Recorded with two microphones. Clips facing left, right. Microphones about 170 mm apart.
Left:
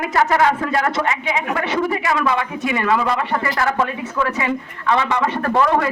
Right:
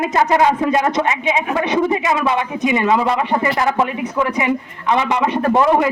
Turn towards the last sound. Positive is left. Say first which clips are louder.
# right 3 dB
turn(degrees=-15)  # may be behind; listen again after turning